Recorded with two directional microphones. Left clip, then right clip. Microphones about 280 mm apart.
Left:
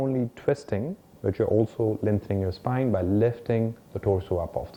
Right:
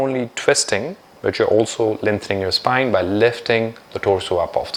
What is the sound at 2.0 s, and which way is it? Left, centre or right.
Speech, centre.